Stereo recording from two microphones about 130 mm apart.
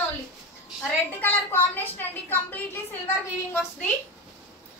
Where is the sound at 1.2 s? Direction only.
15° left (ahead or behind).